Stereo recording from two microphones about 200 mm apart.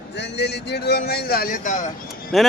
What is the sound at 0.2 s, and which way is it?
Speech, 60° left (ahead or behind).